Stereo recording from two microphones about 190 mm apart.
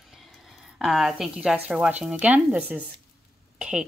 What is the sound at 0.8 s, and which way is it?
Speech, centre (ahead or behind).